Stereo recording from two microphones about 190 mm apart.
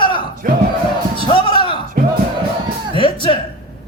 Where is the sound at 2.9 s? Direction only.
25° left (ahead or behind).